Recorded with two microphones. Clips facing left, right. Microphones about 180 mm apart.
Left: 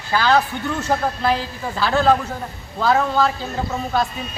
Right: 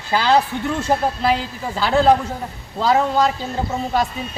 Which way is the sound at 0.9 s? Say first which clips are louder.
Right 1 dB; 10° right (ahead or behind).